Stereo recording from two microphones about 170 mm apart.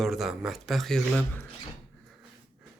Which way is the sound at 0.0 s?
Centre (ahead or behind).